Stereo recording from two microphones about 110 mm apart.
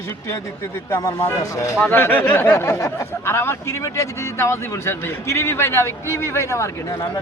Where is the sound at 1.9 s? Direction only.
20° left (ahead or behind).